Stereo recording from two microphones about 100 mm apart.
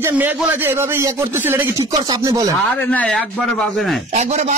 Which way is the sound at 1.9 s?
40° right (ahead or behind).